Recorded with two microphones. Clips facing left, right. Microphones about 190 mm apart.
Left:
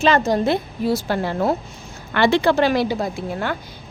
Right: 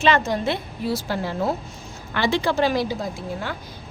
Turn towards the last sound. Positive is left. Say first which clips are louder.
# left 5 dB
turn(degrees=65)  # may be behind; listen again after turning